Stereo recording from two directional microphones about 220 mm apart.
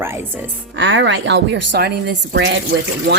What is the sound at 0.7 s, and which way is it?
Speech, 55° right (ahead or behind).